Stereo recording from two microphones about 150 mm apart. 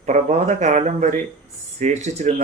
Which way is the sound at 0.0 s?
50° right (ahead or behind).